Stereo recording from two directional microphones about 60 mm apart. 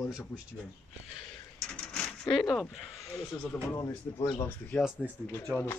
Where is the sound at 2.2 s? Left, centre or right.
Centre.